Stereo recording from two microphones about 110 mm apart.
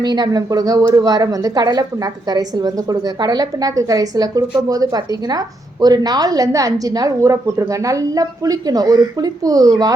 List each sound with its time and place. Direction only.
0.0 s a woman's voice: 40° right (ahead or behind)